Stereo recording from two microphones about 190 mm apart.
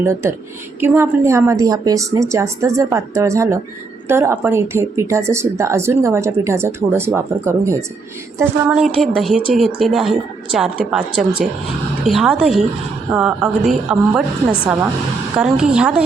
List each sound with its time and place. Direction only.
0.0 s a woman's voice: 15° right (ahead or behind)
9.0 s a woman's voice: centre (ahead or behind)